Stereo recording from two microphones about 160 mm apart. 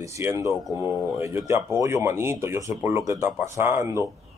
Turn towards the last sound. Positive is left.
turn(degrees=-20)  # may be behind; listen again after turning